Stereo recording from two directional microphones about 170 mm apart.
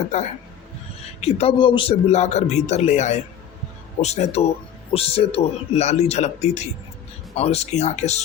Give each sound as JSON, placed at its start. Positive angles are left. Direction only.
{"t": 0.1, "sound": "speech", "side_deg": 40}